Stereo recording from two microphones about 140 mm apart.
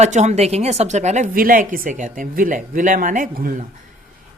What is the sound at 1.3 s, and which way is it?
Speech, 85° right.